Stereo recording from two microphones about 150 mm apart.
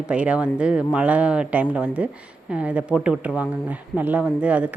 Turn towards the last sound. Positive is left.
turn(degrees=-10)  # may be behind; listen again after turning